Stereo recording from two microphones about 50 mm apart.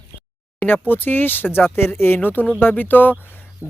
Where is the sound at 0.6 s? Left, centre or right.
Left.